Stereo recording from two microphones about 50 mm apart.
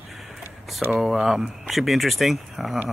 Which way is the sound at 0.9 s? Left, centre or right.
Centre.